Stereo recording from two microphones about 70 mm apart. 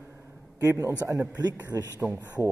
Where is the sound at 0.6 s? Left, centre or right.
Right.